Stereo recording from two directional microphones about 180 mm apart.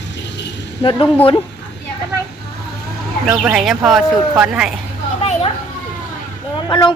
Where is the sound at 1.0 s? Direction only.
10° left (ahead or behind).